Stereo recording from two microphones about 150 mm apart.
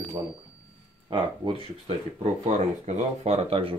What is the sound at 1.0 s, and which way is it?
Speech, 30° right (ahead or behind).